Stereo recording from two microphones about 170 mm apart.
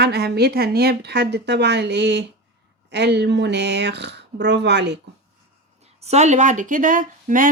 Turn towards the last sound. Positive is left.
turn(degrees=-50)  # may be behind; listen again after turning